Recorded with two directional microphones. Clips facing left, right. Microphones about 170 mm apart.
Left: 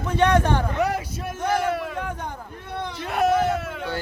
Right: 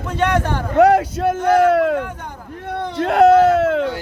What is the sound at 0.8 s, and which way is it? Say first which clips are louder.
A man's voice: right 12 dB; 75° right (ahead or behind).